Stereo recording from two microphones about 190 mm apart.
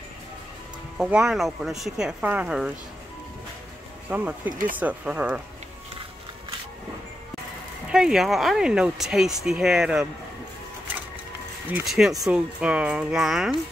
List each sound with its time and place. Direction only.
0.9 s speech: 5° right (ahead or behind)
4.1 s speech: 10° right (ahead or behind)
4.5 s speech: 45° right (ahead or behind)
4.7 s speech: 10° right (ahead or behind)
7.9 s speech: 5° right (ahead or behind)
11.7 s speech: centre (ahead or behind)